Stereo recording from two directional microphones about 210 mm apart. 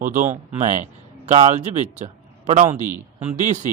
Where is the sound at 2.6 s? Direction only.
10° right (ahead or behind).